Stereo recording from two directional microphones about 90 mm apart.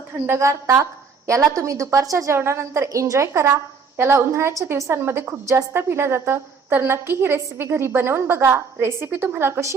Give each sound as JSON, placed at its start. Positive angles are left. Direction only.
{"t": 0.3, "sound": "a woman's voice", "side_deg": -35}